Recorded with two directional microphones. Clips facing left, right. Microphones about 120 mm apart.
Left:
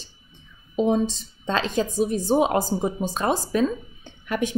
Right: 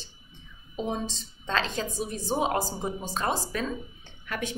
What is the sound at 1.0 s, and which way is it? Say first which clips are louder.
A woman's voice: left 6 dB; 15° left (ahead or behind).